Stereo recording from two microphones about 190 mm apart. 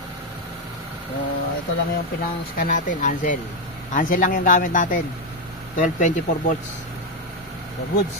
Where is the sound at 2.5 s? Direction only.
45° left (ahead or behind).